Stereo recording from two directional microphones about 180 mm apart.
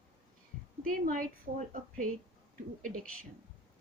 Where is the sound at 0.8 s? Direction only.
50° right (ahead or behind).